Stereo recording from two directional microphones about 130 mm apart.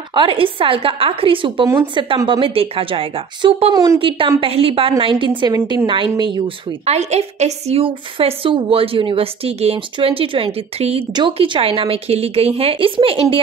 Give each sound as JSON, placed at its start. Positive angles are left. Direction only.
{"t": 0.1, "sound": "a woman's voice", "side_deg": -40}
{"t": 3.7, "sound": "speech", "side_deg": -25}
{"t": 4.4, "sound": "a woman's voice", "side_deg": -45}
{"t": 5.4, "sound": "a woman's voice", "side_deg": -35}
{"t": 6.9, "sound": "a woman's voice", "side_deg": -55}